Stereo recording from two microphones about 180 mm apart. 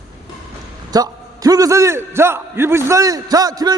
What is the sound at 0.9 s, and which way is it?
A man's voice, 20° right (ahead or behind).